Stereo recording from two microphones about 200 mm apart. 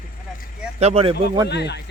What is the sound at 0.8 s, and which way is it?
Speech, 30° right (ahead or behind).